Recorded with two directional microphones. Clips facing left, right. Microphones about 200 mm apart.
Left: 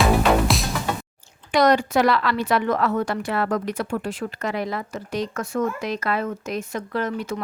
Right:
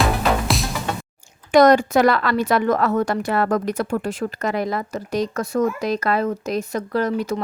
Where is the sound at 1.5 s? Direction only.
45° right (ahead or behind).